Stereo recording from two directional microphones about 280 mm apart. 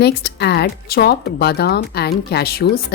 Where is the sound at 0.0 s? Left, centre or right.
Left.